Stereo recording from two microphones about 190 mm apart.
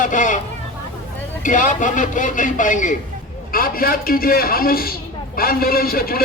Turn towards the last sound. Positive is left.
turn(degrees=50)  # may be behind; listen again after turning